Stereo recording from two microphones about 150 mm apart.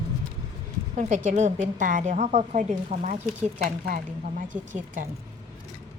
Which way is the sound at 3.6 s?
65° right (ahead or behind).